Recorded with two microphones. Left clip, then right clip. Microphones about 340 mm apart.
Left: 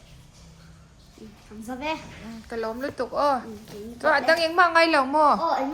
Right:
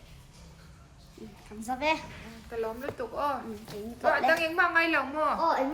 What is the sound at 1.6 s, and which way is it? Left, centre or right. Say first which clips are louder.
Speech: right 2 dB; centre.